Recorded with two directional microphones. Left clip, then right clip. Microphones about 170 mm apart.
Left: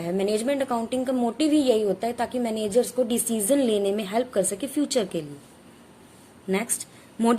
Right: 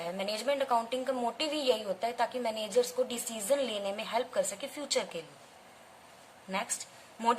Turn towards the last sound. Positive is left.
turn(degrees=30)  # may be behind; listen again after turning